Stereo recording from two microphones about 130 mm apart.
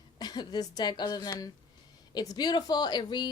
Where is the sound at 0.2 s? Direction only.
30° left (ahead or behind).